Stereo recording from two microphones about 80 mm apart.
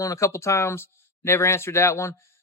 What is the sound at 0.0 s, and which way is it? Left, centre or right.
Speech, left.